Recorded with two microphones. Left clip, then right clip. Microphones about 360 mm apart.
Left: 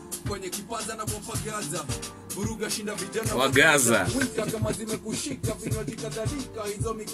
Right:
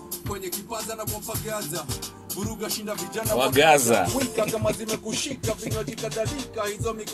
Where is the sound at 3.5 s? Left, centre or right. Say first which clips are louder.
Right 2 dB; centre.